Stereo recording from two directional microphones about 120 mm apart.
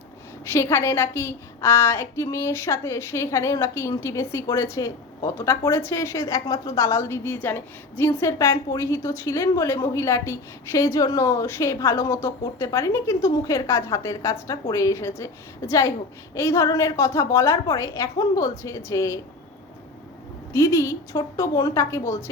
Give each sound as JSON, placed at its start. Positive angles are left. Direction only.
{"t": 0.5, "sound": "a woman's voice", "side_deg": 20}
{"t": 20.5, "sound": "a woman's voice", "side_deg": 25}